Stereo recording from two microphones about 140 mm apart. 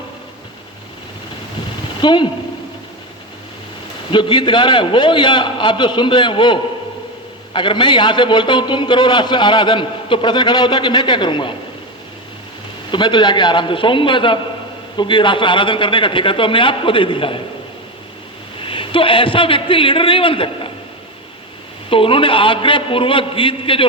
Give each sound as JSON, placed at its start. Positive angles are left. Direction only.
{"t": 2.0, "sound": "a man's voice", "side_deg": 35}
{"t": 4.1, "sound": "a man's voice", "side_deg": 35}
{"t": 12.9, "sound": "a man's voice", "side_deg": 35}
{"t": 18.6, "sound": "a man's voice", "side_deg": 40}
{"t": 21.8, "sound": "a man's voice", "side_deg": 40}